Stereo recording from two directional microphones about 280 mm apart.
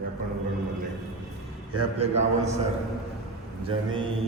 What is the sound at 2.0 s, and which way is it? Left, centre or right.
Speech, right.